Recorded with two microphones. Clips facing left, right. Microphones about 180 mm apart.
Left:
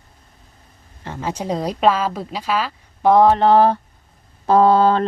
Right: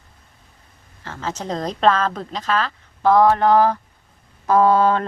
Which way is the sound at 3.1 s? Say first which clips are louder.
Left 2 dB; 20° left (ahead or behind).